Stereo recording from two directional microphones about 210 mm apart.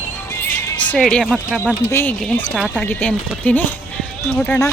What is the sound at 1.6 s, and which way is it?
Speech, 10° left (ahead or behind).